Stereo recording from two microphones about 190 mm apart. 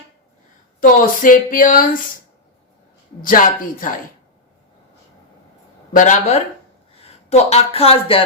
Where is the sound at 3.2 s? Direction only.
45° left (ahead or behind).